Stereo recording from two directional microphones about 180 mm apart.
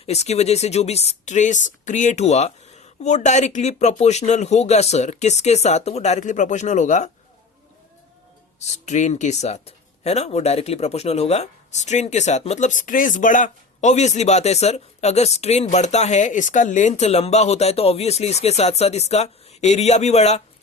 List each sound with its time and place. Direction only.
0.0 s speech: 35° left (ahead or behind)
8.5 s speech: 40° left (ahead or behind)